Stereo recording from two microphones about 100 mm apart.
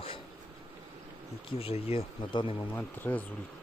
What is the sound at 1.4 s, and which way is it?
Speech, 75° left (ahead or behind).